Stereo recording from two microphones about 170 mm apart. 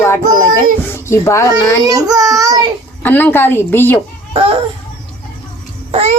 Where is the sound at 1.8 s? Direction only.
20° right (ahead or behind).